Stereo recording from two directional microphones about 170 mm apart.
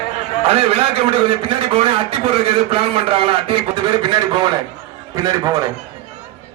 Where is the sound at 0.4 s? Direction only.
35° right (ahead or behind).